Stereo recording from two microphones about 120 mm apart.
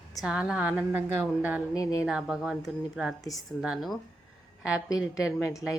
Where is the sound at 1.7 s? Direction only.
30° left (ahead or behind).